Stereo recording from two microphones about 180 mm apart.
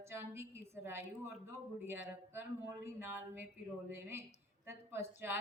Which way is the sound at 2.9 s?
10° right (ahead or behind).